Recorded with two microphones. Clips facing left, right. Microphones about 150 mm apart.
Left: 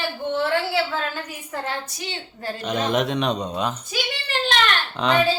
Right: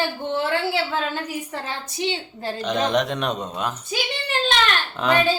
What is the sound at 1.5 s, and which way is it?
A woman's voice, 25° right (ahead or behind).